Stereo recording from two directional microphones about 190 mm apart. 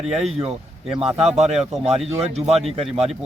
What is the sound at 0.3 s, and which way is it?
A man's voice, 30° right (ahead or behind).